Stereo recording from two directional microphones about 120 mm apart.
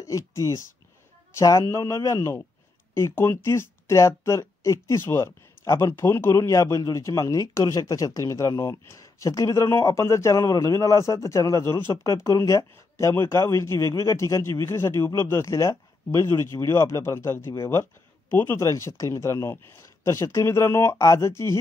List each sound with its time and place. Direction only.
0.0 s speech: 25° left (ahead or behind)